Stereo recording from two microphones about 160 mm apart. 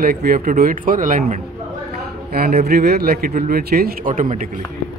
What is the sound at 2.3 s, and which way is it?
A man's voice, 70° right (ahead or behind).